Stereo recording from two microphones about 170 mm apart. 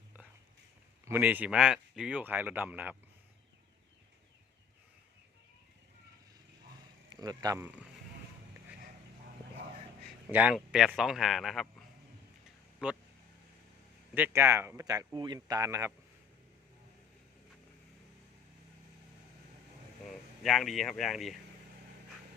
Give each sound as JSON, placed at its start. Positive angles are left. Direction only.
{"t": 1.0, "sound": "speech", "side_deg": -10}
{"t": 7.1, "sound": "a man's voice", "side_deg": -20}
{"t": 10.2, "sound": "a man's voice", "side_deg": -10}
{"t": 12.8, "sound": "speech", "side_deg": -5}
{"t": 14.1, "sound": "speech", "side_deg": -15}
{"t": 20.1, "sound": "speech", "side_deg": 0}